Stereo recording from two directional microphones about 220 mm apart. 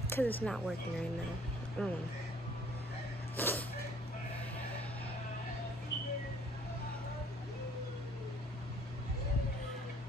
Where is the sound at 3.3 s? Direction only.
10° left (ahead or behind).